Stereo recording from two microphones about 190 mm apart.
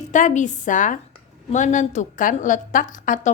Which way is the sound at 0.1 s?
40° left (ahead or behind).